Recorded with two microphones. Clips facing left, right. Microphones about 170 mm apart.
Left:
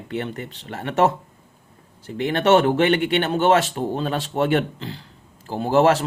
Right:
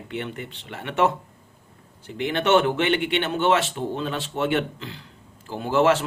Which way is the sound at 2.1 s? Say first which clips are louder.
Left 3 dB; 40° left (ahead or behind).